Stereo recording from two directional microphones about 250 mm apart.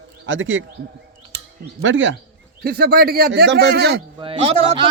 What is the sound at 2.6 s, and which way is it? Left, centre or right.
Speech, right.